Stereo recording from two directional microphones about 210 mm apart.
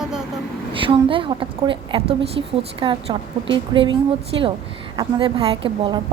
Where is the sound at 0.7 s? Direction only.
25° right (ahead or behind).